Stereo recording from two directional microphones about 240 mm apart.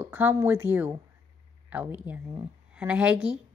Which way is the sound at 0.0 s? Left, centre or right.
Centre.